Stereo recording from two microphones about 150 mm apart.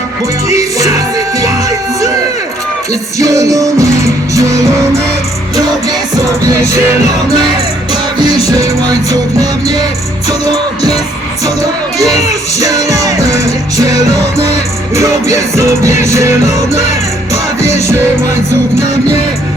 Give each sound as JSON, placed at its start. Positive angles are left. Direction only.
{"t": 0.4, "sound": "music", "side_deg": -20}
{"t": 3.2, "sound": "music", "side_deg": -20}
{"t": 12.5, "sound": "music", "side_deg": -20}
{"t": 14.9, "sound": "music", "side_deg": -20}